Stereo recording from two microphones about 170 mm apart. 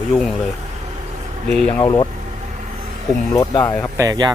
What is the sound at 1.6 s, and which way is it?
Speech, 5° left (ahead or behind).